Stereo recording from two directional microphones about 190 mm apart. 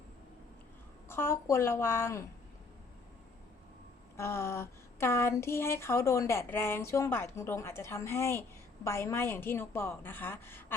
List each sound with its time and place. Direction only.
1.0 s speech: 15° left (ahead or behind)
4.2 s speech: 15° left (ahead or behind)